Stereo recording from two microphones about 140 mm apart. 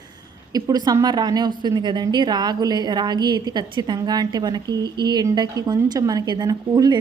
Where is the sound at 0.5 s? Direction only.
30° right (ahead or behind).